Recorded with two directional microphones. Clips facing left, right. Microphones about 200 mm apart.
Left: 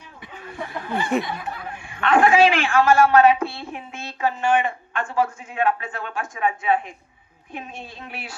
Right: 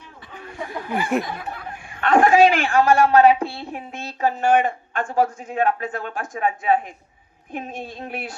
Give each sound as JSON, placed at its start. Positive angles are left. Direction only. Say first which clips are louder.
{"t": 0.9, "sound": "speech", "louder": "right 1 dB", "side_deg": -15}
{"t": 1.2, "sound": "a woman's voice", "louder": "even", "side_deg": -50}